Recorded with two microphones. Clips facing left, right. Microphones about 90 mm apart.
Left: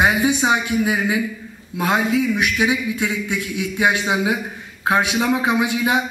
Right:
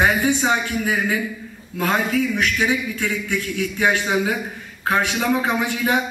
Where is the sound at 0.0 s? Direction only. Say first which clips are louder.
Left 1 dB; 15° left (ahead or behind).